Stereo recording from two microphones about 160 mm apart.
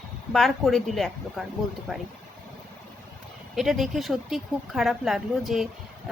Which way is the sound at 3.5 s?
Centre (ahead or behind).